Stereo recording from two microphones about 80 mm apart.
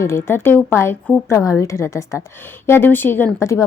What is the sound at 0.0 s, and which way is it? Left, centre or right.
A woman's voice, left.